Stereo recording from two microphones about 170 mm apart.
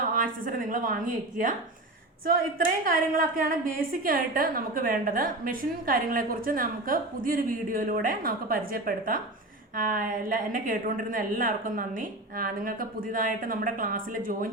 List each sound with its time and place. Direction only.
0.0 s a woman's voice: 55° right (ahead or behind)